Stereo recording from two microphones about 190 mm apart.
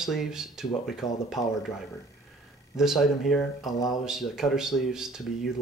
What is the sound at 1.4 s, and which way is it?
Speech, 15° left (ahead or behind).